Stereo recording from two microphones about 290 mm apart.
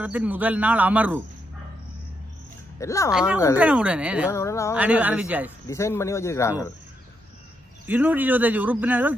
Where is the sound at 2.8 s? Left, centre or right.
Centre.